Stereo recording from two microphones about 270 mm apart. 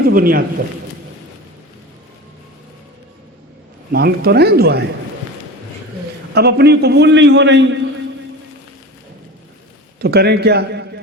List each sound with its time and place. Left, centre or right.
0.0 s a man's voice: right
3.9 s a man's voice: right
6.3 s a man's voice: right
10.0 s a man's voice: right